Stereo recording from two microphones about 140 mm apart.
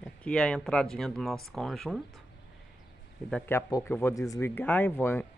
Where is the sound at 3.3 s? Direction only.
15° left (ahead or behind).